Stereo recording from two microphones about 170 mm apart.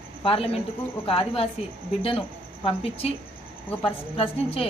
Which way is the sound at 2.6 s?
35° left (ahead or behind).